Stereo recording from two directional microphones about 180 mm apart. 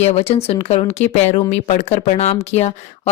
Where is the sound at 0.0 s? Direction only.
35° left (ahead or behind).